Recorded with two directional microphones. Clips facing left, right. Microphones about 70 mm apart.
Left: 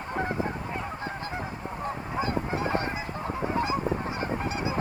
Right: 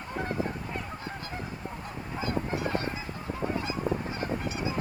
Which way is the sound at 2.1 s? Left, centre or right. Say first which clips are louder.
Left 1 dB; left.